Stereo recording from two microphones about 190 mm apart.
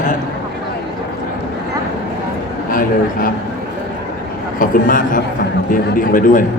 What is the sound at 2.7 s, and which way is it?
Speech, 50° left (ahead or behind).